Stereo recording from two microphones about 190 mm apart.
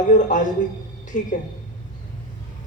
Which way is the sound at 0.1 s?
40° left (ahead or behind).